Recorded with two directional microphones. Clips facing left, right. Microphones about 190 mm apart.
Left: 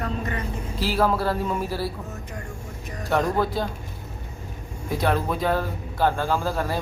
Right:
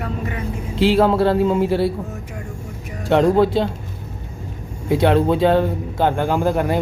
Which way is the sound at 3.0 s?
30° right (ahead or behind).